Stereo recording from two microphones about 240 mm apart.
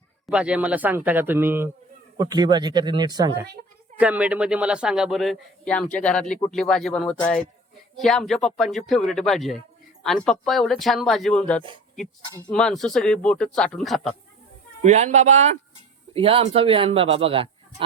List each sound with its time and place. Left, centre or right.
0.3 s speech: centre
3.9 s speech: centre
14.8 s a man's voice: right